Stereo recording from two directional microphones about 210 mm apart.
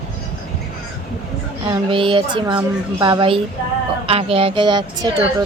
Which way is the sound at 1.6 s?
20° right (ahead or behind).